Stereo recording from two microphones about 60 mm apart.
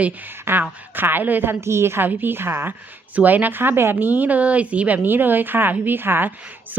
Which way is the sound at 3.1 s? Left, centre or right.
Right.